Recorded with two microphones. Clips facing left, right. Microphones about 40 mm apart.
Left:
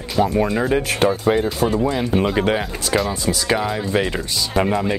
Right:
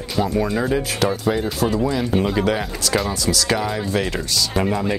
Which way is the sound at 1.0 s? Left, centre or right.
Left.